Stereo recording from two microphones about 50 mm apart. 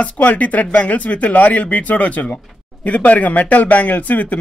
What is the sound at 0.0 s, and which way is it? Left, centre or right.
Speech, left.